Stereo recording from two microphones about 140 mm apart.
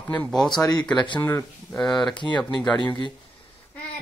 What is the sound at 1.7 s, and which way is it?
Speech, 5° left (ahead or behind).